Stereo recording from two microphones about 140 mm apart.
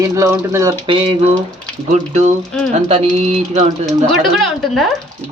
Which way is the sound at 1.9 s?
60° right (ahead or behind).